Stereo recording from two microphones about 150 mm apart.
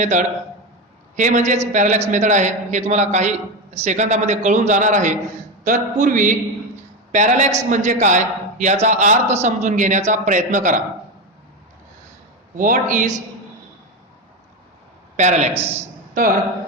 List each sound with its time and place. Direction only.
0.0 s a man's voice: 55° right (ahead or behind)
12.5 s a man's voice: 60° right (ahead or behind)
15.1 s speech: 50° right (ahead or behind)
15.5 s a man's voice: 15° right (ahead or behind)